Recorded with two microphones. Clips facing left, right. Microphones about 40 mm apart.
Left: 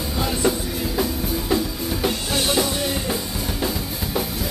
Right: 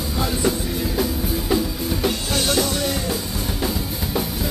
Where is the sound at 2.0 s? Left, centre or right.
Centre.